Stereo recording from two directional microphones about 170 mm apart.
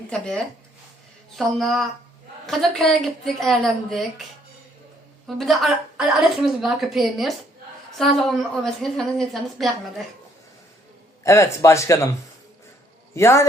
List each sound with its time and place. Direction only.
0.1 s a woman's voice: 5° left (ahead or behind)
5.4 s a woman's voice: centre (ahead or behind)
11.2 s speech: 15° left (ahead or behind)
13.1 s speech: 15° left (ahead or behind)